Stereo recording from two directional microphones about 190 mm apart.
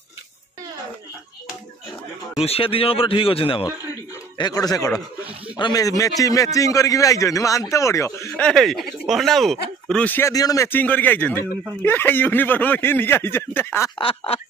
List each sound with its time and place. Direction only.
2.4 s a man's voice: 30° left (ahead or behind); by 8.5 s 15° left (ahead or behind)
8.5 s speech: centre (ahead or behind)
13.9 s a man's voice: 30° left (ahead or behind)